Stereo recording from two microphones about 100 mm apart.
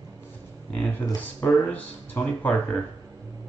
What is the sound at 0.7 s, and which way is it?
Speech, 15° left (ahead or behind).